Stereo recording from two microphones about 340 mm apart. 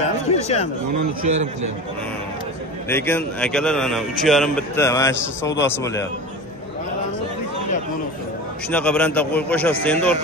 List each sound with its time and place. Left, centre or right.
0.0 s a sound: centre
2.9 s a man's voice: centre
8.6 s a man's voice: centre